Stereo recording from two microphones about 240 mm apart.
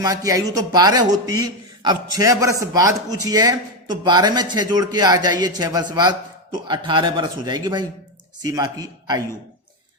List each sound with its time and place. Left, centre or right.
0.0 s speech: centre